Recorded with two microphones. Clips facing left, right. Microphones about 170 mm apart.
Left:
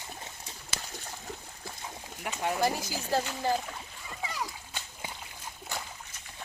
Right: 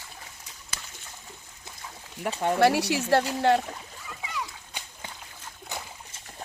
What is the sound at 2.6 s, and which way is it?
Speech, 75° right (ahead or behind).